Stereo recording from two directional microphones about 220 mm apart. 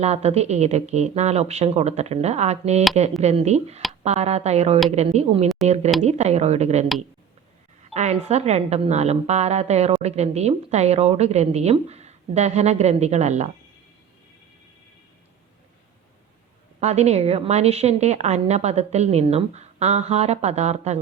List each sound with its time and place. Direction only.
0.0 s a woman's voice: 30° right (ahead or behind)
7.9 s a woman's voice: 30° right (ahead or behind)
16.8 s a woman's voice: 30° right (ahead or behind)